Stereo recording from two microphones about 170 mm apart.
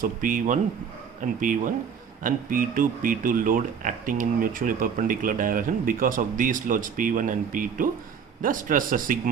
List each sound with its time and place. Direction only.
0.0 s speech: 50° right (ahead or behind)